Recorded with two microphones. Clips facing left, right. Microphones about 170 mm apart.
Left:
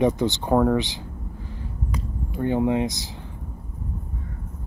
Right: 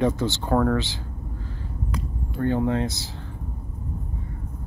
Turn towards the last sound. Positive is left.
turn(degrees=15)  # may be behind; listen again after turning